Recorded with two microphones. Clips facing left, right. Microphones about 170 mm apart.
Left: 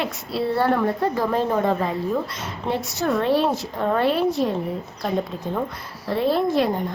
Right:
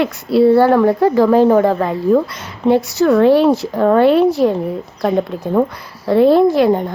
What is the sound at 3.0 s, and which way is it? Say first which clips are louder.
Speech: right 9 dB; 75° right (ahead or behind).